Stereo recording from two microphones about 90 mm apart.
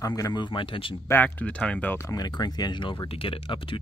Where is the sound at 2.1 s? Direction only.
45° left (ahead or behind); by 3.8 s 80° left.